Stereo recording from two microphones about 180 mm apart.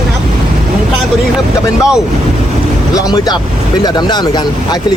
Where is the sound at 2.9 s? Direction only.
20° left (ahead or behind).